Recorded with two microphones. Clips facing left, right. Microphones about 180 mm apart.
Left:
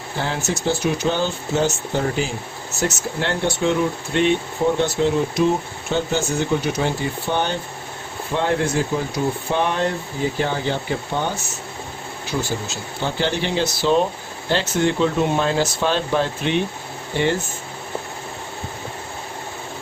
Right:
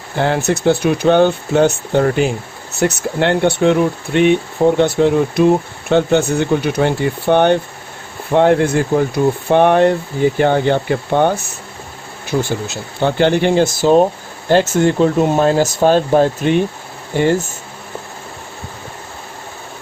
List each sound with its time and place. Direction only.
0.2 s speech: 60° right (ahead or behind)
12.4 s speech: 60° right (ahead or behind)